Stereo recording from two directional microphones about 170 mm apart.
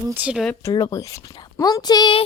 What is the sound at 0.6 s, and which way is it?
Speech, 20° left (ahead or behind).